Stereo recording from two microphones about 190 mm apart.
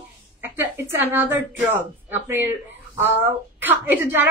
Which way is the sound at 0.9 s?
10° right (ahead or behind).